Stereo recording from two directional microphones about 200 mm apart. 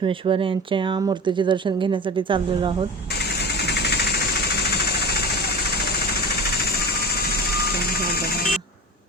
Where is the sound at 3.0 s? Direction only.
55° left (ahead or behind).